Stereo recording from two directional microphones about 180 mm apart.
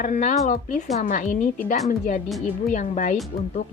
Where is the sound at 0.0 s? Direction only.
40° left (ahead or behind).